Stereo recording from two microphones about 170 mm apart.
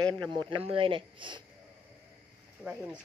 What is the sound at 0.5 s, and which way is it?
Speech, 30° right (ahead or behind).